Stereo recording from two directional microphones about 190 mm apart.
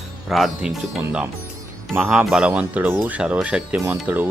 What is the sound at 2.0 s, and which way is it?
Speech, centre (ahead or behind).